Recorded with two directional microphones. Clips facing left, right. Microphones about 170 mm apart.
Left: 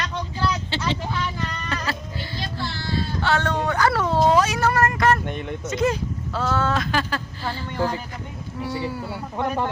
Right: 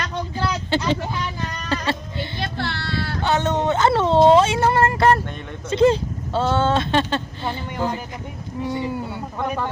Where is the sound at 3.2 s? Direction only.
20° right (ahead or behind).